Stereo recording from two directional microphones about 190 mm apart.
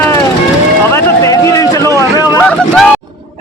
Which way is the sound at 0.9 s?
15° left (ahead or behind).